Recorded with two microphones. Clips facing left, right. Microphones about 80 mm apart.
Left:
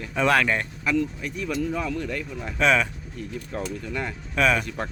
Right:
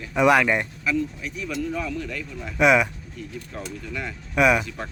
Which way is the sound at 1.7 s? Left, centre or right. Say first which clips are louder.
Left 1 dB; left.